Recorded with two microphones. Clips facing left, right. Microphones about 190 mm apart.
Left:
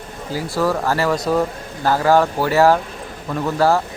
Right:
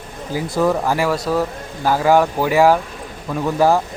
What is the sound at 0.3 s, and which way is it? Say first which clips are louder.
Speech: right 2 dB; 20° right (ahead or behind).